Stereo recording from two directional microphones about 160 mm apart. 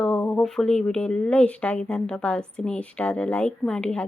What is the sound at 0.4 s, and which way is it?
Speech, 5° left (ahead or behind).